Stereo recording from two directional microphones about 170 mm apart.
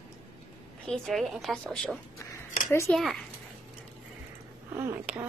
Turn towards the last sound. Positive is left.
turn(degrees=-10)  # may be behind; listen again after turning